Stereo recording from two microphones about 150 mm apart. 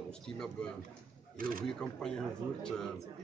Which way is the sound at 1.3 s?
70° right (ahead or behind).